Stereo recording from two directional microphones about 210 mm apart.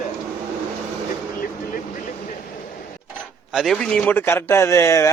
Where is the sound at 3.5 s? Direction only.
Centre (ahead or behind).